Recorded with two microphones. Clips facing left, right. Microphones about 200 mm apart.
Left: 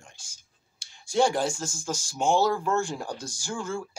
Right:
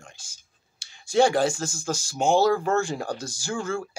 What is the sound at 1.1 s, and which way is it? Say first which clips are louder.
Speech: right 4 dB; 80° right.